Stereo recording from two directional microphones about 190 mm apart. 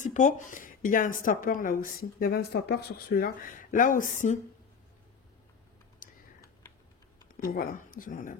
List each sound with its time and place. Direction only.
0.0 s a woman's voice: 40° left (ahead or behind)
6.0 s typing: 45° left (ahead or behind)
7.3 s a woman's voice: 50° left (ahead or behind)